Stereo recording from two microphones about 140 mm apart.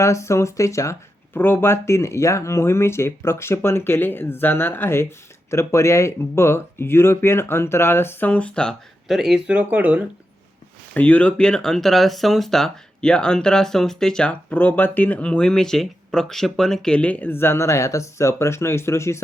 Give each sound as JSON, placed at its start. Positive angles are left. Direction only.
{"t": 0.0, "sound": "speech", "side_deg": 20}
{"t": 10.9, "sound": "speech", "side_deg": 10}